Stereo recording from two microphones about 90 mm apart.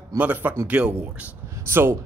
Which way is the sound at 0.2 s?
15° right (ahead or behind).